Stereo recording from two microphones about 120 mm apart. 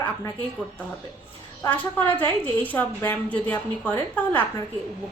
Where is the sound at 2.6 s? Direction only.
15° left (ahead or behind).